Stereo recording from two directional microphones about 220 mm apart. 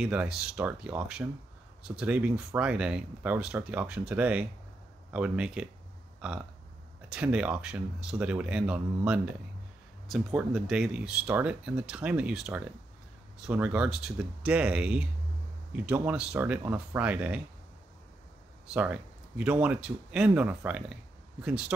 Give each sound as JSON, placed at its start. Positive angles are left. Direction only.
{"t": 0.0, "sound": "speech", "side_deg": -5}
{"t": 7.1, "sound": "speech", "side_deg": -5}
{"t": 18.7, "sound": "speech", "side_deg": -5}